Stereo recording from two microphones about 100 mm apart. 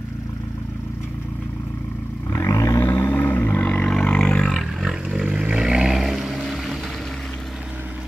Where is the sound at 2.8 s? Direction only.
20° left (ahead or behind).